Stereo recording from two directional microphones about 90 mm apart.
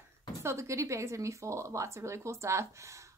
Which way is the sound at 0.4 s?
35° right (ahead or behind).